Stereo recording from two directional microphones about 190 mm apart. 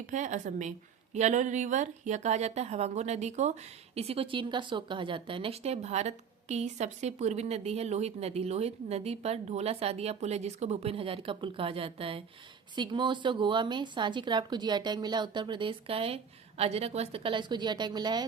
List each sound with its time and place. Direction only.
0.1 s a woman's voice: 40° right (ahead or behind); by 18.3 s 20° right (ahead or behind)